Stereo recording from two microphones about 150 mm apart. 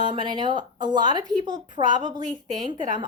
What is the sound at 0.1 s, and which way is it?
Speech, 30° right (ahead or behind).